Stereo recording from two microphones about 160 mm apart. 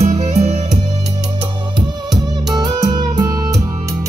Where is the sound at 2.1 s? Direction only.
25° right (ahead or behind).